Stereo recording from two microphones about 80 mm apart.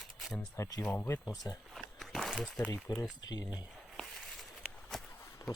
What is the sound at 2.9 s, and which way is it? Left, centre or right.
Speech, left.